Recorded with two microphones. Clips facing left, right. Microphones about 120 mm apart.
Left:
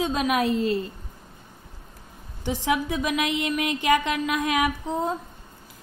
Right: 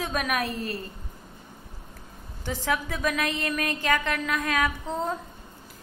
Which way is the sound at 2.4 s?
15° left (ahead or behind).